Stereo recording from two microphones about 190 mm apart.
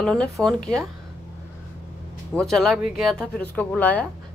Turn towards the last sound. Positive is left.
turn(degrees=10)  # may be behind; listen again after turning